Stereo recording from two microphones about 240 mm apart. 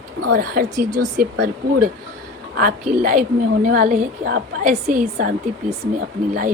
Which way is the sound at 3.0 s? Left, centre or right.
Right.